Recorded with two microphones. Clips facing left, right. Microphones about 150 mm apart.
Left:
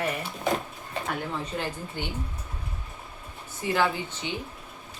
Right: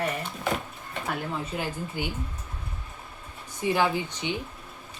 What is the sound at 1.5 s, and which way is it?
Speech, 10° right (ahead or behind).